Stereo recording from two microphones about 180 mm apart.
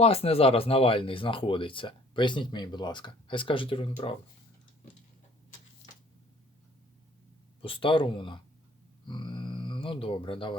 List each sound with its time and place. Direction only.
0.0 s speech: 35° left (ahead or behind)
7.6 s speech: 30° left (ahead or behind)